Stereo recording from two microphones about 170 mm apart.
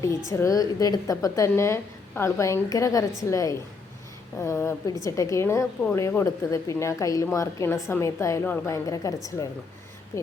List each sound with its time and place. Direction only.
0.3 s a woman's voice: 20° left (ahead or behind)